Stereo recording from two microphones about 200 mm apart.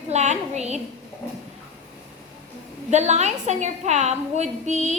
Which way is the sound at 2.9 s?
35° right (ahead or behind).